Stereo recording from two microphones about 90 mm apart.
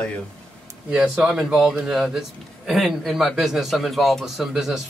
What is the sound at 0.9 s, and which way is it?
A man's voice, 10° right (ahead or behind).